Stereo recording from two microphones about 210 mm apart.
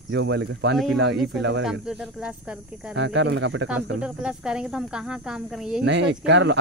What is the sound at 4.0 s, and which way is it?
Speech, 5° right (ahead or behind).